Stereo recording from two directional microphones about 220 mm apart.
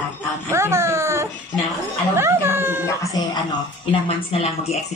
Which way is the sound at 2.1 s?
10° right (ahead or behind).